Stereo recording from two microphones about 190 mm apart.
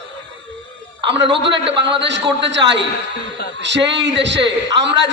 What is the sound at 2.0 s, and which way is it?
A man's voice, 70° right (ahead or behind).